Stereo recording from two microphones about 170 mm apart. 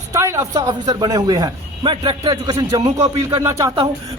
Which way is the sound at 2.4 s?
20° right (ahead or behind).